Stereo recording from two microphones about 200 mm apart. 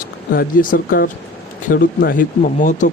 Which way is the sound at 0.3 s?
45° left (ahead or behind).